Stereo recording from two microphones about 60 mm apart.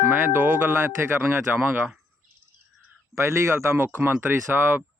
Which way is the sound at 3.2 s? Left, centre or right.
Right.